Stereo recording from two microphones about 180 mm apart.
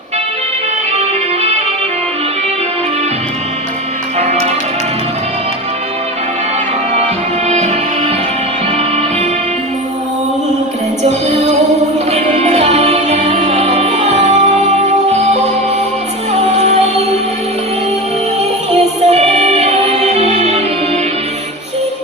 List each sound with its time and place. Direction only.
4.2 s music: 40° right (ahead or behind)
6.9 s music: 35° right (ahead or behind)
12.1 s music: 40° right (ahead or behind)
19.0 s music: 35° right (ahead or behind)